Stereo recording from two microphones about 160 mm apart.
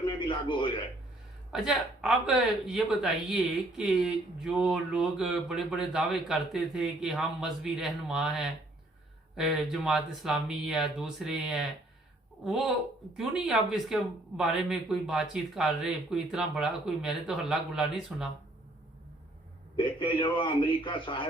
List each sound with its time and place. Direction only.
0.0 s a sound: 30° left (ahead or behind)
1.6 s speech: 5° right (ahead or behind)
13.1 s speech: centre (ahead or behind)
19.7 s a man's voice: 30° left (ahead or behind)